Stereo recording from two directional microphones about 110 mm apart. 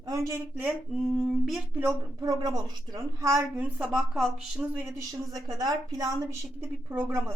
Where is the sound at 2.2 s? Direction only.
35° right (ahead or behind).